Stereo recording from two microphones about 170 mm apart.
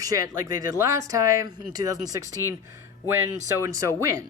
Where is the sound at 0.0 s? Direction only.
20° right (ahead or behind).